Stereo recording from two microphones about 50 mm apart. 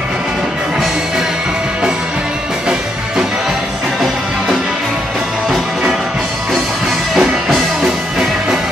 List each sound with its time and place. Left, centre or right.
7.2 s music: centre